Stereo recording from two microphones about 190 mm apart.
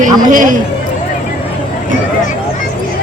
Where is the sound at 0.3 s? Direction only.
45° right (ahead or behind).